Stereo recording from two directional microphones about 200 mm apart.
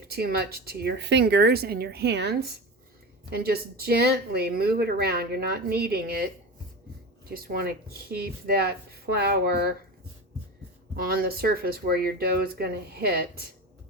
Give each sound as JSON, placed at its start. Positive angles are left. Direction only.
{"t": 0.1, "sound": "speech", "side_deg": -50}
{"t": 7.3, "sound": "speech", "side_deg": -50}
{"t": 10.9, "sound": "speech", "side_deg": -50}